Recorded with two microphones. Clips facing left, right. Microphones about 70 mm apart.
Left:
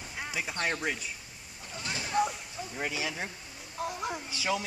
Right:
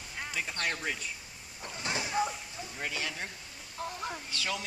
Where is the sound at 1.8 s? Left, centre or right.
Right.